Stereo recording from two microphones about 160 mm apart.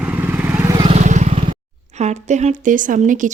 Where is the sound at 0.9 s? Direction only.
50° right (ahead or behind).